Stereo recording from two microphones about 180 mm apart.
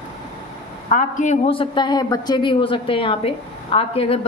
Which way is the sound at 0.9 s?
45° left (ahead or behind).